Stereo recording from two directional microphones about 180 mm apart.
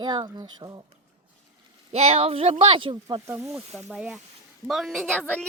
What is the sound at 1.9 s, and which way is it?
Speech, 35° right (ahead or behind).